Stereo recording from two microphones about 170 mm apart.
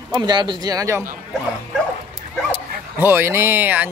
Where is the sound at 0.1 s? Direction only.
25° right (ahead or behind).